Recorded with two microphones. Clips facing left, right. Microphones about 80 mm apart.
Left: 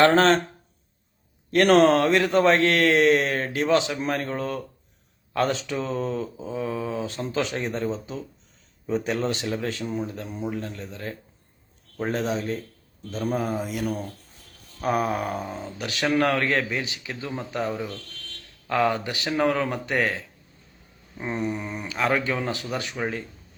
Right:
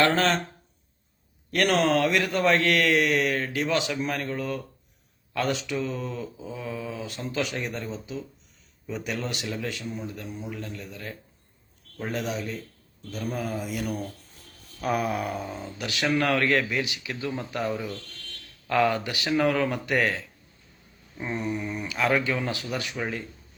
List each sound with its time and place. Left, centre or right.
0.0 s speech: left
1.5 s speech: left
10.8 s speech: left
14.8 s speech: left
19.3 s speech: left
19.6 s speech: left
21.4 s speech: left